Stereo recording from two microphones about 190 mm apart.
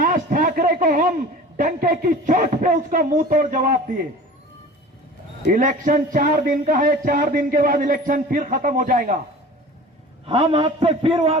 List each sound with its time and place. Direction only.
0.0 s a sound: 45° right (ahead or behind)
1.5 s speech: 45° right (ahead or behind)
5.5 s speech: 45° right (ahead or behind)
10.2 s a man's voice: 30° right (ahead or behind)